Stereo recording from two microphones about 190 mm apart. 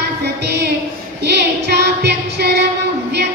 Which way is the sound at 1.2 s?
60° right (ahead or behind).